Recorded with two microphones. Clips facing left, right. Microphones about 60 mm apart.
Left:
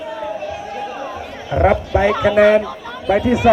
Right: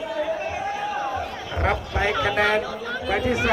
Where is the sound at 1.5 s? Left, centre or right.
Centre.